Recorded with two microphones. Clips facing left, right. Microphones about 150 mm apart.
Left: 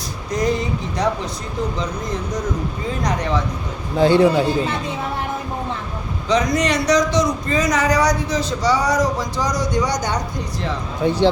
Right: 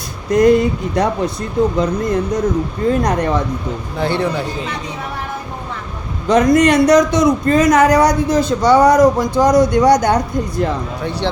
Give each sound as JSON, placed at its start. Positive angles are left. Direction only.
{"t": 0.3, "sound": "a man's voice", "side_deg": -55}
{"t": 3.9, "sound": "a man's voice", "side_deg": 15}
{"t": 6.2, "sound": "a man's voice", "side_deg": -50}
{"t": 11.0, "sound": "a man's voice", "side_deg": 20}